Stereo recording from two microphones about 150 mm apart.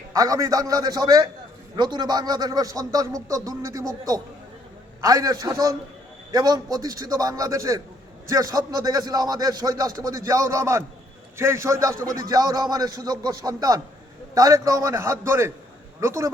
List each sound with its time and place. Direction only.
0.1 s speech: 25° right (ahead or behind)